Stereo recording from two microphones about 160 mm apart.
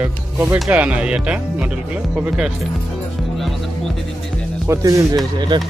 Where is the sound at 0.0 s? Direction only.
10° right (ahead or behind).